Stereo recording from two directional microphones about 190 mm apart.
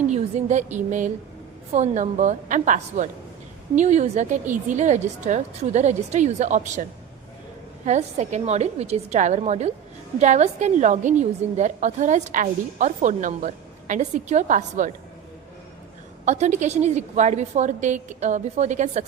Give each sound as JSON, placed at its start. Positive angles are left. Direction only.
{"t": 0.1, "sound": "a woman's voice", "side_deg": -35}
{"t": 7.9, "sound": "a woman's voice", "side_deg": -40}
{"t": 16.2, "sound": "a woman's voice", "side_deg": -35}